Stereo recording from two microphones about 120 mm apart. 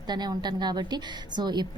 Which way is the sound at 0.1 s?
35° right (ahead or behind).